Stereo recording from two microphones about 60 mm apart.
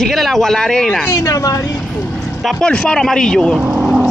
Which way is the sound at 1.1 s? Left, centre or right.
Left.